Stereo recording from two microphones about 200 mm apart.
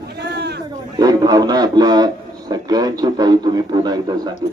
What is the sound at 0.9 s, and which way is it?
A man's voice, 20° right (ahead or behind).